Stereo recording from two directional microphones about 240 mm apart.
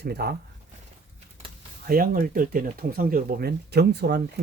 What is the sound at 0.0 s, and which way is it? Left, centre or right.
Speech, right.